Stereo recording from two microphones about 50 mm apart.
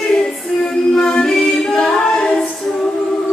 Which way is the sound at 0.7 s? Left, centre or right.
Centre.